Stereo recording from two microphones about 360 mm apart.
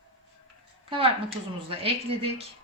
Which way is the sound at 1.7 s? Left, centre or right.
Centre.